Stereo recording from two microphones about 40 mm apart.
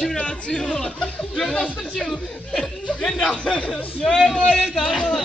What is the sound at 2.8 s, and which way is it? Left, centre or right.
Speech, left.